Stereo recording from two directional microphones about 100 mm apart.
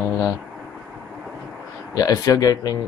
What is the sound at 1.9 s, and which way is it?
Speech, 40° left (ahead or behind).